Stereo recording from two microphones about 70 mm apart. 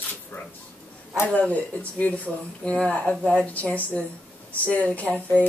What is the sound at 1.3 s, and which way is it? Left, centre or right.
Speech, left.